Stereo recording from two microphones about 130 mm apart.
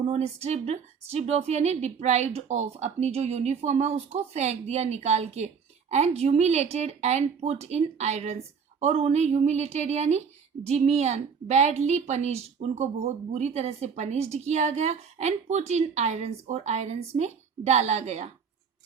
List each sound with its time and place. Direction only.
0.1 s a woman's voice: 55° right (ahead or behind)